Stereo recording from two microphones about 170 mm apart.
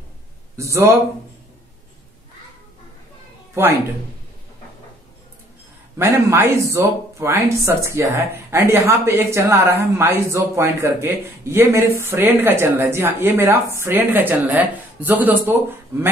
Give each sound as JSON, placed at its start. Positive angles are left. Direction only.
{"t": 0.6, "sound": "speech", "side_deg": -15}
{"t": 5.9, "sound": "speech", "side_deg": -15}